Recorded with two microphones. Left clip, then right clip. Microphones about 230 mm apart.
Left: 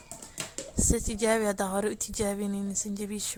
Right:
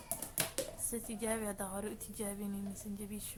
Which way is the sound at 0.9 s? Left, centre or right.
Left.